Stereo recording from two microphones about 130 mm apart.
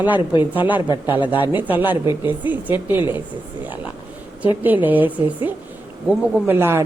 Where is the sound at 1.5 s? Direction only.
15° right (ahead or behind).